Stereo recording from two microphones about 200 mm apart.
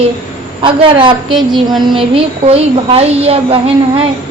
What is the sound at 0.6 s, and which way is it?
A child's voice, 25° right (ahead or behind).